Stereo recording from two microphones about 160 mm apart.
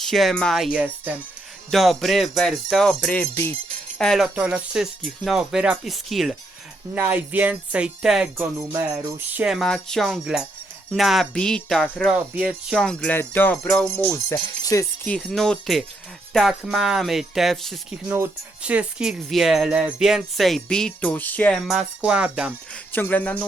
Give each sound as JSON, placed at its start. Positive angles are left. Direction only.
{"t": 0.0, "sound": "speech", "side_deg": 0}
{"t": 8.5, "sound": "music", "side_deg": -25}
{"t": 8.9, "sound": "speech", "side_deg": -10}
{"t": 12.1, "sound": "speech", "side_deg": -10}
{"t": 12.7, "sound": "speech", "side_deg": 5}
{"t": 14.3, "sound": "speech", "side_deg": 20}
{"t": 15.0, "sound": "speech", "side_deg": 5}
{"t": 18.1, "sound": "speech", "side_deg": -10}
{"t": 21.7, "sound": "speech", "side_deg": -5}
{"t": 22.7, "sound": "speech", "side_deg": 10}